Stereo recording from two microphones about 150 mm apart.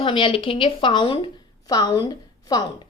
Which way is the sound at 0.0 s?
35° left (ahead or behind).